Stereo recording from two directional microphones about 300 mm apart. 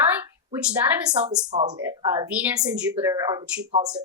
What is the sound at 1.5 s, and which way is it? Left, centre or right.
Speech, centre.